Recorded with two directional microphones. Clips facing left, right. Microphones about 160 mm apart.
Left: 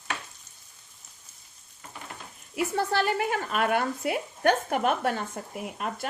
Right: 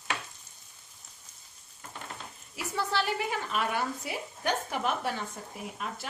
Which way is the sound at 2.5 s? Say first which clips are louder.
Left 5 dB; 50° left (ahead or behind).